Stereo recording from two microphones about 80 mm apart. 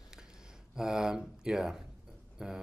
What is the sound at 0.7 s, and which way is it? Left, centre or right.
Speech, centre.